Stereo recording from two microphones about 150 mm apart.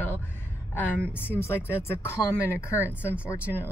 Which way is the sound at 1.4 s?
15° left (ahead or behind).